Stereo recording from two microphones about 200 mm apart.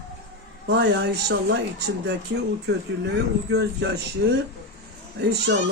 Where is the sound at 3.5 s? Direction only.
55° right (ahead or behind).